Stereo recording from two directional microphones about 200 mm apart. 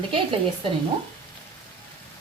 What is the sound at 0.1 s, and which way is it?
Speech, 25° right (ahead or behind).